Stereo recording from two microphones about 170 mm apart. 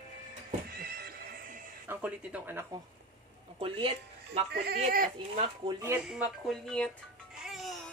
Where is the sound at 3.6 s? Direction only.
30° right (ahead or behind).